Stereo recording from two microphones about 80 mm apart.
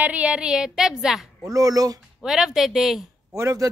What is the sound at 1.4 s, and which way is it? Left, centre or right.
Speech, right.